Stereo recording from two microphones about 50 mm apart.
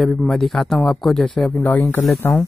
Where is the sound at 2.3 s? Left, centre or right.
Centre.